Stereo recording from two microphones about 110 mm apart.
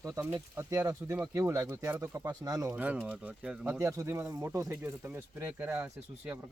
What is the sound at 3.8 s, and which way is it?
Speech, 30° right (ahead or behind).